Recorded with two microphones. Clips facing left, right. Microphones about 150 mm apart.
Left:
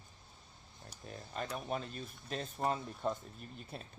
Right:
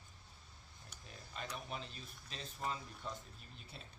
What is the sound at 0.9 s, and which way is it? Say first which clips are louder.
Speech: left 8 dB; 45° left (ahead or behind).